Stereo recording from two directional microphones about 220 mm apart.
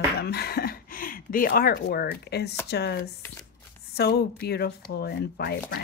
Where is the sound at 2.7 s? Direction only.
50° left (ahead or behind).